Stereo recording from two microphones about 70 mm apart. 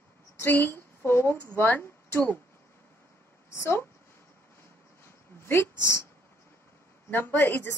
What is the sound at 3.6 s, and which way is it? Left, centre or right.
Speech, left.